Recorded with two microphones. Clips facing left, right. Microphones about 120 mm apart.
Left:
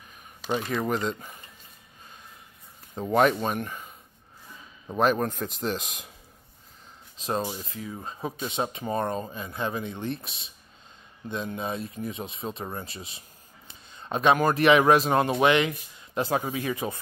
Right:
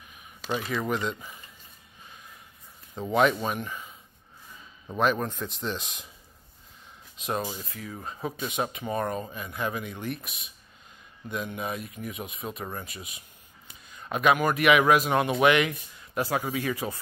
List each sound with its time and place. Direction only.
0.8 s speech: 40° left (ahead or behind)
3.0 s speech: 45° left (ahead or behind)
4.9 s speech: 40° left (ahead or behind)
7.2 s speech: 30° left (ahead or behind)